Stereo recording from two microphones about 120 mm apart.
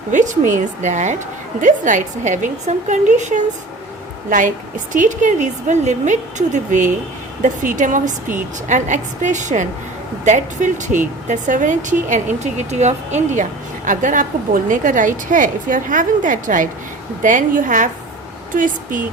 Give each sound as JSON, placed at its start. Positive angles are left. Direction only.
{"t": 0.1, "sound": "speech", "side_deg": -90}